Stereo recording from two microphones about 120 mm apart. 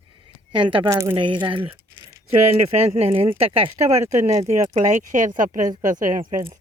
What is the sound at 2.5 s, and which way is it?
Speech, 55° right (ahead or behind).